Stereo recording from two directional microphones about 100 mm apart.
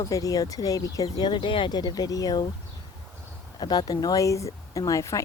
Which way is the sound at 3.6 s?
45° left (ahead or behind).